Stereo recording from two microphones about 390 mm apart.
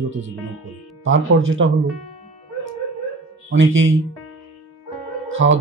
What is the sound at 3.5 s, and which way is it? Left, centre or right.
Speech, right.